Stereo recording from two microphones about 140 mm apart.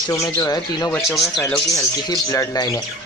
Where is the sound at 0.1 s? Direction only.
25° left (ahead or behind).